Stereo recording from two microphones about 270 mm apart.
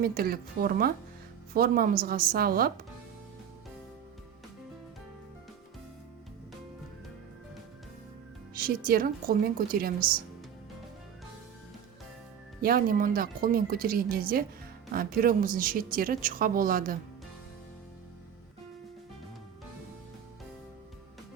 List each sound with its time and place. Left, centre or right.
0.0 s speech: right
8.5 s speech: right
12.6 s speech: right